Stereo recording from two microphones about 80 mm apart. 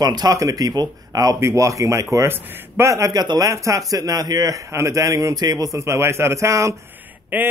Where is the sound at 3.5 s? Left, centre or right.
Right.